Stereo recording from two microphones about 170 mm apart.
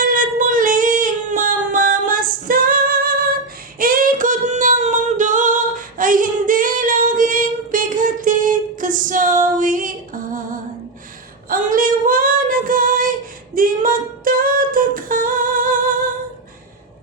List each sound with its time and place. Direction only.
0.0 s child singing: 50° right (ahead or behind)
1.7 s female singing: 50° right (ahead or behind)
3.8 s singing: 55° right (ahead or behind)
11.4 s female singing: 55° right (ahead or behind)